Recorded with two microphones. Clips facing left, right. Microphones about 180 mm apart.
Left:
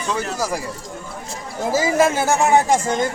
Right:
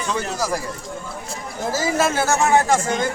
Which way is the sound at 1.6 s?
15° left (ahead or behind).